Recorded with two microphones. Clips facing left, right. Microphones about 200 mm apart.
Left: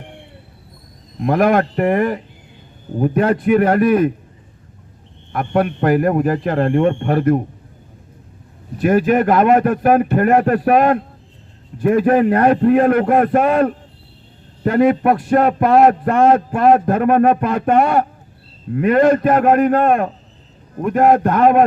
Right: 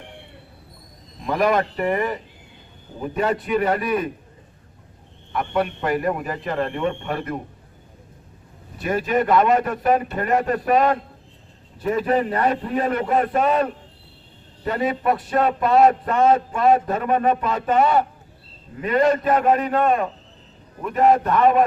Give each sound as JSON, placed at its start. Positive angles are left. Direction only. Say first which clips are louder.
{"t": 1.2, "sound": "a man's voice", "louder": "left 6 dB", "side_deg": 55}
{"t": 5.3, "sound": "a man's voice", "louder": "left 5 dB", "side_deg": 50}
{"t": 8.8, "sound": "a man's voice", "louder": "left 7 dB", "side_deg": 55}